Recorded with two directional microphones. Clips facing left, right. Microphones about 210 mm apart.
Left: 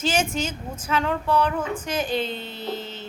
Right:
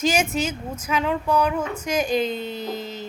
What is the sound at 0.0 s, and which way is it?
Speech, 10° right (ahead or behind).